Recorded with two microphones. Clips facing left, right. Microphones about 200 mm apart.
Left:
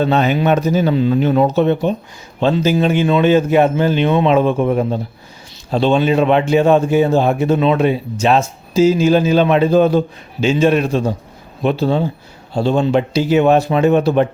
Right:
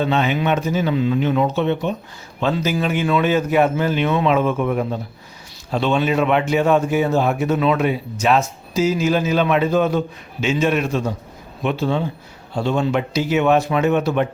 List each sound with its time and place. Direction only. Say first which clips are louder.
0.0 s a man's voice: left 4 dB; 40° left (ahead or behind)